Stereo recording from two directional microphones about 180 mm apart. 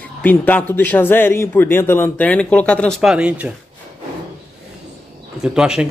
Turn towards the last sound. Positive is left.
turn(degrees=-5)  # may be behind; listen again after turning